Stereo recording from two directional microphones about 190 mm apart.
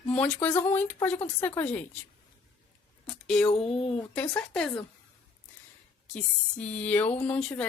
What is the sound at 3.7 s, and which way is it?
Speech, 30° left (ahead or behind).